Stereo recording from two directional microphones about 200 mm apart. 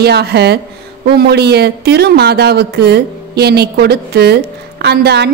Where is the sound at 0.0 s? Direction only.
55° right (ahead or behind).